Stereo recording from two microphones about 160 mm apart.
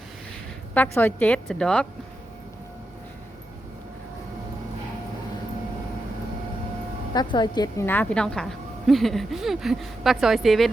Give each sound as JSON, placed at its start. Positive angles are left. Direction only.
{"t": 0.7, "sound": "a woman's voice", "side_deg": 10}
{"t": 7.1, "sound": "a woman's voice", "side_deg": 25}
{"t": 7.9, "sound": "speech", "side_deg": 10}